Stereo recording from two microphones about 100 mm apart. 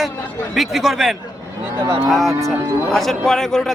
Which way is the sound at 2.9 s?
Centre (ahead or behind).